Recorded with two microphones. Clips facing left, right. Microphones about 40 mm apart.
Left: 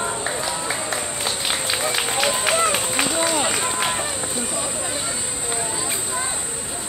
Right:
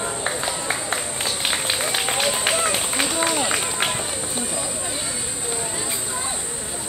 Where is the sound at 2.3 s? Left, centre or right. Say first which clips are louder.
Left 2 dB; centre.